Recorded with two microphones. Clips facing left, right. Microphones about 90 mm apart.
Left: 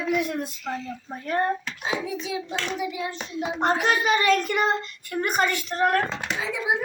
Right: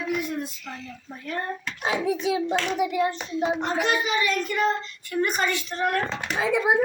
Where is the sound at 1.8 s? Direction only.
60° right (ahead or behind).